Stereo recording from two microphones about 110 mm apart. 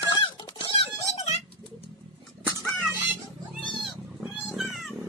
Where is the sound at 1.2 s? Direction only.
90° left.